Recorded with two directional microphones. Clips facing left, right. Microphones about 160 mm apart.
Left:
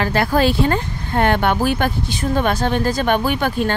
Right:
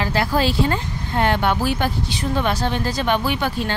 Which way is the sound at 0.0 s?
55° left (ahead or behind).